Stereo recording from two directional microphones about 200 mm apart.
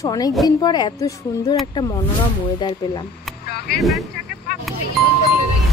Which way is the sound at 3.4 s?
50° left (ahead or behind).